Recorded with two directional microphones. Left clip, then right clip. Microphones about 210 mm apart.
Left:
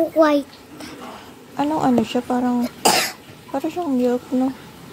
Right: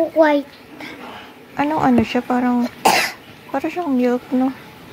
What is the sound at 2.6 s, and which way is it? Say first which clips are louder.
Cough: right 2 dB; 20° left (ahead or behind).